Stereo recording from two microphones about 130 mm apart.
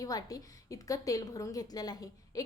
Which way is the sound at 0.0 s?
30° left (ahead or behind).